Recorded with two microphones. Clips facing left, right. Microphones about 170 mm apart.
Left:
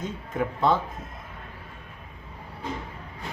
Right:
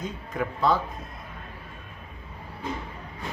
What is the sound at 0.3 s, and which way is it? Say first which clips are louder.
Speech: left 1 dB; 25° left (ahead or behind).